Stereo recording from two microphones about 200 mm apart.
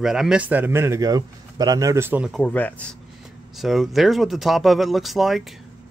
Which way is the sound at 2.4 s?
10° left (ahead or behind).